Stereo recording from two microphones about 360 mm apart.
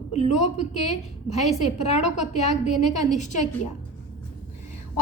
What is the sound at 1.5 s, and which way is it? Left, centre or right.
Speech, centre.